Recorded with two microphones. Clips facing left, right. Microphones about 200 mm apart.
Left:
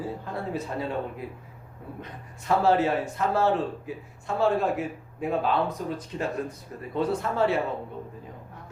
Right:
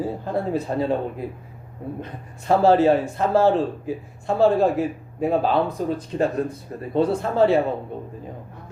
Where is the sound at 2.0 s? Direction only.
30° right (ahead or behind).